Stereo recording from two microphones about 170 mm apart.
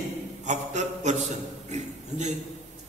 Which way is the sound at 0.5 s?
45° right (ahead or behind).